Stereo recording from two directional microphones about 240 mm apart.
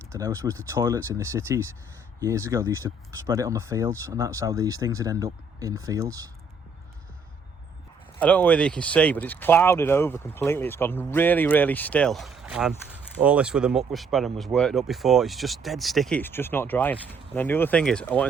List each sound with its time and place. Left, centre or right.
0.1 s speech: centre
8.2 s speech: centre